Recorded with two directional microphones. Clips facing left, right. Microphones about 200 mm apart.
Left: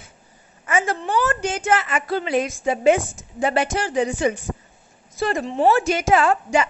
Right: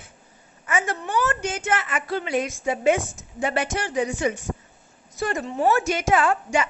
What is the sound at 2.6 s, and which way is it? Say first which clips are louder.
A woman's voice: left 4 dB; 30° left (ahead or behind).